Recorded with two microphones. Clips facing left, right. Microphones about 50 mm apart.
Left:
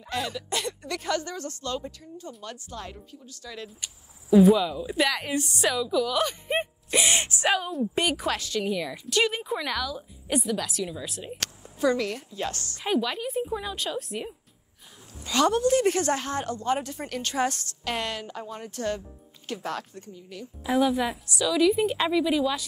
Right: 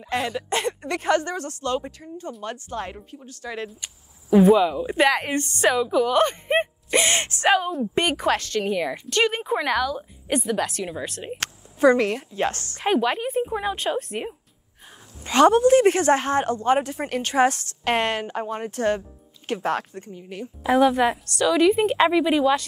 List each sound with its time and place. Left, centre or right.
0.1 s speech: right
1.2 s speech: right
4.6 s a woman's voice: right
7.4 s a woman's voice: centre
7.9 s a woman's voice: right
8.6 s a woman's voice: right
17.8 s a woman's voice: right
21.8 s speech: right
22.1 s a woman's voice: right